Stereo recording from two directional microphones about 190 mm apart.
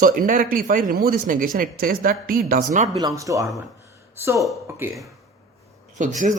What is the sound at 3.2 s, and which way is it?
Speech, 15° right (ahead or behind).